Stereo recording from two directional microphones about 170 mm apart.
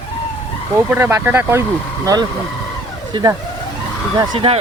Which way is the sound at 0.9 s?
15° right (ahead or behind).